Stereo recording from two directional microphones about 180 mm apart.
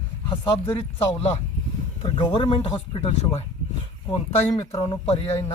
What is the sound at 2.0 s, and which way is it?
Speech, 25° left (ahead or behind).